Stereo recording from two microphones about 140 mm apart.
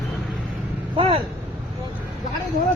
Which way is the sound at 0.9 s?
45° right (ahead or behind).